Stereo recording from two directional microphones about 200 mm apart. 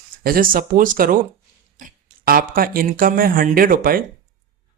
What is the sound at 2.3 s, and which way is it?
Speech, 45° right (ahead or behind).